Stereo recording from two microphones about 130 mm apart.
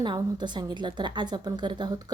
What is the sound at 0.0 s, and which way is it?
Speech, 35° right (ahead or behind).